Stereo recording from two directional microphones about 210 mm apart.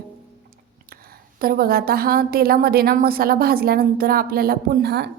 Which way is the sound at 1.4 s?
45° right (ahead or behind).